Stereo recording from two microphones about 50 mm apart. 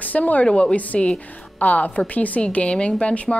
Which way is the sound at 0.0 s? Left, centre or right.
Left.